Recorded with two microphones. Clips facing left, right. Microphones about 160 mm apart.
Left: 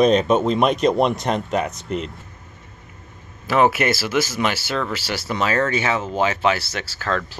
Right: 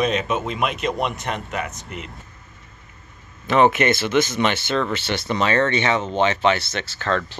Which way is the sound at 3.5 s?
5° left (ahead or behind).